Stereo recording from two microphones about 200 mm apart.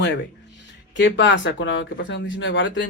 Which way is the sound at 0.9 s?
65° left (ahead or behind).